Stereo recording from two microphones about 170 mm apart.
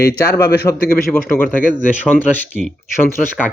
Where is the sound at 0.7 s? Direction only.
20° left (ahead or behind).